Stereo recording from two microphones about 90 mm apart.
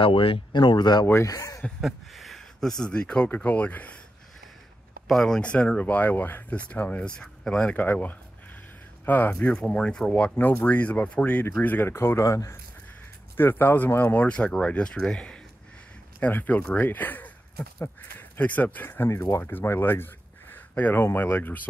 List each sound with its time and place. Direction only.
0.0 s speech: 80° left; by 1.0 s 55° left (ahead or behind)
1.2 s speech: 40° left (ahead or behind)
1.8 s speech: centre (ahead or behind); by 4.0 s 15° left (ahead or behind)
5.0 s speech: 5° left (ahead or behind)
7.8 s speech: 20° left (ahead or behind); by 12.5 s 40° left (ahead or behind)
13.4 s speech: 25° left (ahead or behind)
16.2 s speech: 20° left (ahead or behind)
18.4 s speech: 20° left (ahead or behind)